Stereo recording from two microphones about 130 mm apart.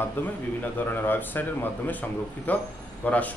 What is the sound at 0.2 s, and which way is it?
A man's voice, 15° left (ahead or behind).